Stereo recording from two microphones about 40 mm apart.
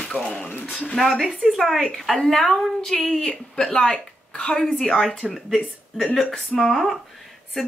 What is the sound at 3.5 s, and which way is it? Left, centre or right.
Speech, centre.